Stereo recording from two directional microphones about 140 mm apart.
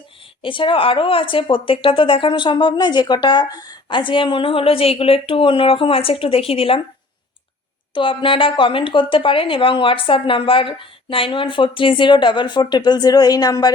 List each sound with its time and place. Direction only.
0.4 s a woman's voice: 35° left (ahead or behind)
7.9 s a woman's voice: 35° left (ahead or behind)